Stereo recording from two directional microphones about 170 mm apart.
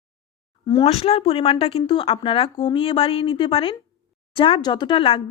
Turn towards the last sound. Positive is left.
turn(degrees=30)  # may be behind; listen again after turning